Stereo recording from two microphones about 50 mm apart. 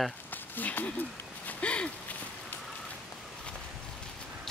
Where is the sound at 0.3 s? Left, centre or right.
Left.